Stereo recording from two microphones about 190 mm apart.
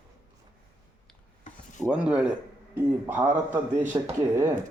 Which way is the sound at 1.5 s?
40° left (ahead or behind).